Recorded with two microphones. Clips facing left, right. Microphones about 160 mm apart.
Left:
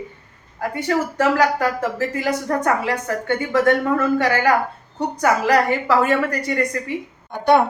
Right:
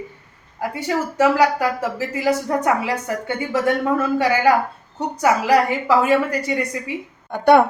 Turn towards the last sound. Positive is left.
turn(degrees=-60)  # may be behind; listen again after turning